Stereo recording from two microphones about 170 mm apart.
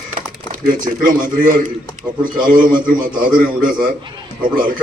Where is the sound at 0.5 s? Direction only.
55° right (ahead or behind).